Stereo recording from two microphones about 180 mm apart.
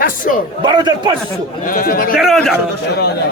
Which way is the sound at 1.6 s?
50° left (ahead or behind).